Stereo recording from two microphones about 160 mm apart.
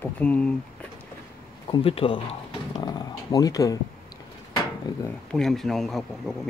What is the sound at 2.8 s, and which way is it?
Speech, 25° left (ahead or behind).